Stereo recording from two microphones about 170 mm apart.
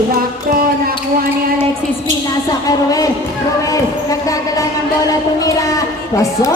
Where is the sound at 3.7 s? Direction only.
20° left (ahead or behind).